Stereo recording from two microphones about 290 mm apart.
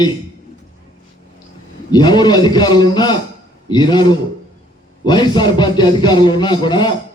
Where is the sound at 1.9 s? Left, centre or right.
Centre.